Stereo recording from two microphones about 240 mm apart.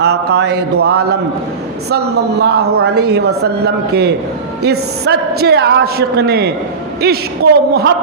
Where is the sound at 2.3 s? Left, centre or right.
Right.